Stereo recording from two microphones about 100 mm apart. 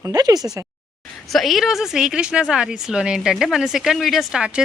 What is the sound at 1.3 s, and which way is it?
Speech, centre (ahead or behind).